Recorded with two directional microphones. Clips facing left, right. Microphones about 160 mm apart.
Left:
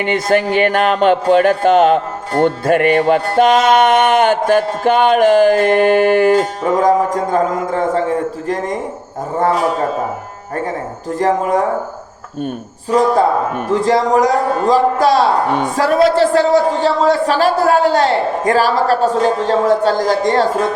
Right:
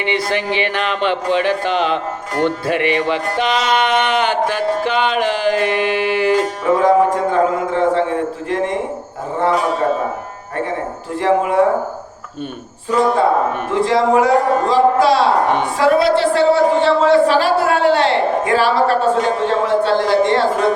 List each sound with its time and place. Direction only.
0.0 s speech: 45° left (ahead or behind)
11.1 s speech: 40° left (ahead or behind)
13.7 s a man's voice: 40° left (ahead or behind)